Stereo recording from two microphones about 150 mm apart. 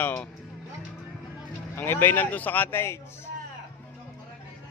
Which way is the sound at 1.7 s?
15° left (ahead or behind).